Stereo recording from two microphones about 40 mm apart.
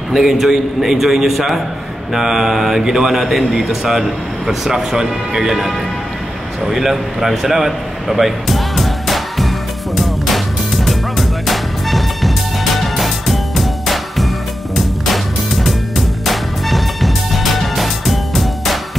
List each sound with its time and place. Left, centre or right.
0.1 s a man's voice: centre
9.9 s music: centre
16.3 s music: centre